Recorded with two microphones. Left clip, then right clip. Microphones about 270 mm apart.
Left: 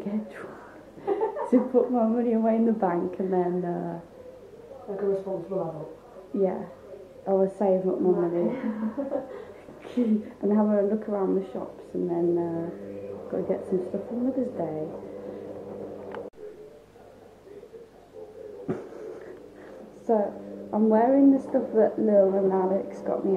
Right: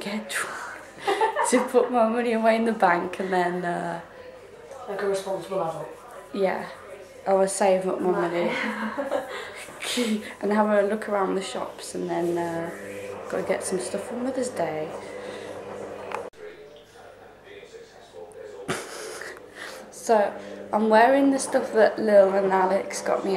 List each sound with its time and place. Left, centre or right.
0.0 s a woman's voice: centre
6.4 s a woman's voice: centre
18.7 s a sound: centre
20.1 s a woman's voice: centre